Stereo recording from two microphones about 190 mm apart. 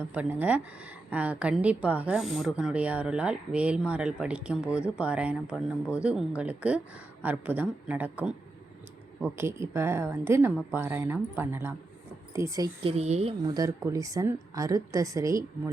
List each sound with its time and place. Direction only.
0.1 s a woman's voice: 10° right (ahead or behind)
12.8 s speech: 35° right (ahead or behind)
13.4 s a woman's voice: 20° right (ahead or behind)